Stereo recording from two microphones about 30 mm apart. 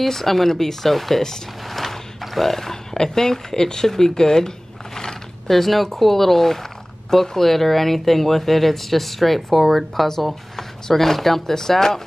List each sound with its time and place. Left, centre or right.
0.0 s speech: centre
5.5 s speech: centre
10.5 s speech: centre